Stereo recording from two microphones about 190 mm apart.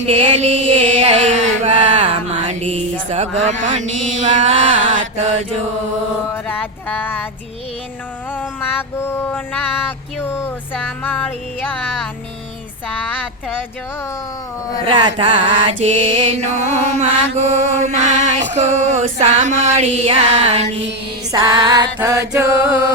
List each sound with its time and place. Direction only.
0.1 s mantra: 35° right (ahead or behind)
6.3 s music: 10° left (ahead or behind)
9.0 s music: 15° left (ahead or behind)
14.8 s mantra: 25° right (ahead or behind)
21.3 s music: 20° right (ahead or behind)
21.9 s mantra: 10° right (ahead or behind)